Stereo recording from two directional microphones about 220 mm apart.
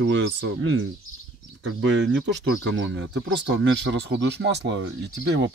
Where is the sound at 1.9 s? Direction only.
55° right (ahead or behind).